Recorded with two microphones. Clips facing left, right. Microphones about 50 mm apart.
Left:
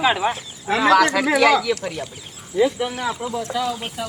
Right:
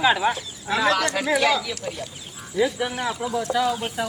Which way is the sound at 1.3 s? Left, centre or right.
Left.